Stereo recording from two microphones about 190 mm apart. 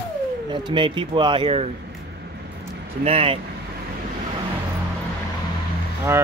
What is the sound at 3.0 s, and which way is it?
Speech, 30° right (ahead or behind).